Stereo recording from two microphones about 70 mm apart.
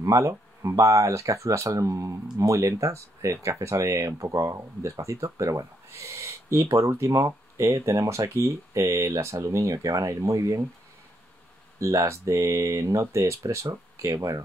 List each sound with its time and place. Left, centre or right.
0.0 s speech: right
11.8 s speech: right